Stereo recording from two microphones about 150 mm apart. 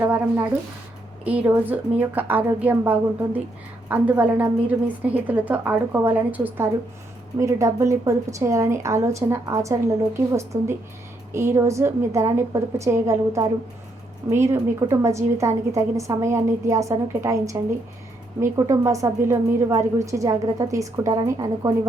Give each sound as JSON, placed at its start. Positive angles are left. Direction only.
{"t": 0.0, "sound": "a woman's voice", "side_deg": -10}